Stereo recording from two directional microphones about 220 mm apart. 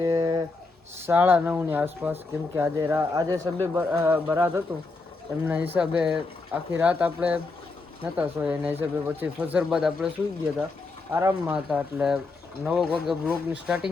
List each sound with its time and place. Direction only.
0.0 s a sound: 15° right (ahead or behind)
1.0 s speech: 10° right (ahead or behind)
11.1 s speech: 10° right (ahead or behind)